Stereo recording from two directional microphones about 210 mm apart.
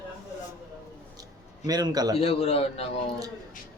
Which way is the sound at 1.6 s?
15° right (ahead or behind).